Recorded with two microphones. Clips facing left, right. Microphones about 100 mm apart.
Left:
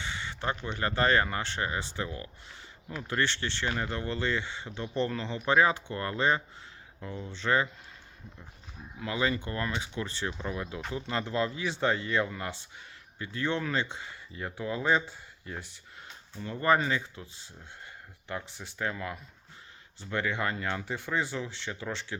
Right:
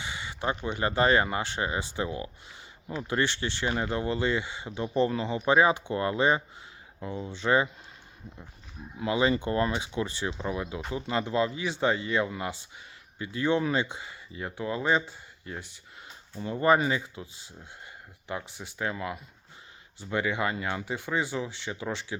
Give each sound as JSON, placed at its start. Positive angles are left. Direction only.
{"t": 0.0, "sound": "speech", "side_deg": -10}
{"t": 9.0, "sound": "speech", "side_deg": -20}
{"t": 16.3, "sound": "speech", "side_deg": -15}